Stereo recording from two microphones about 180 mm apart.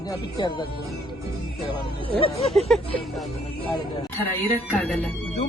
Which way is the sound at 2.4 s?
Centre (ahead or behind).